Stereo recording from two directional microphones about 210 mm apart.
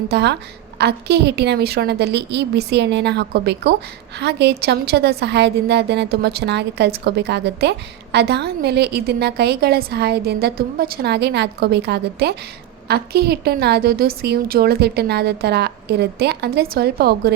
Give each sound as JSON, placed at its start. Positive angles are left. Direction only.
{"t": 0.1, "sound": "a woman's voice", "side_deg": -55}